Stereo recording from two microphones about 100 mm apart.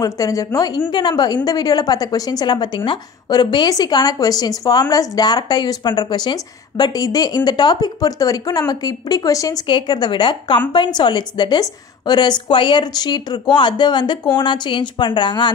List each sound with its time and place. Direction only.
0.0 s a woman's voice: 35° left (ahead or behind)
0.7 s a woman's voice: 50° left (ahead or behind)
9.7 s speech: 50° left (ahead or behind)